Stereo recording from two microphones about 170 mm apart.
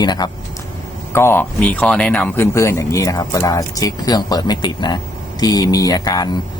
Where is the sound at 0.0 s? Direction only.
25° left (ahead or behind).